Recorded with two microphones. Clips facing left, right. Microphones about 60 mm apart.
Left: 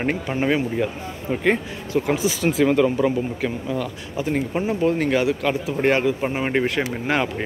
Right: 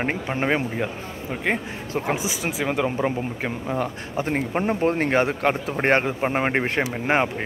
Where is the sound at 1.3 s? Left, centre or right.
Centre.